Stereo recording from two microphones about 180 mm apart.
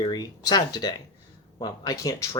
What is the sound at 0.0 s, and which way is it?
Speech, 20° left (ahead or behind).